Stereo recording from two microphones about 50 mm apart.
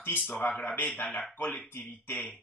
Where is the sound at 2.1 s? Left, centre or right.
Left.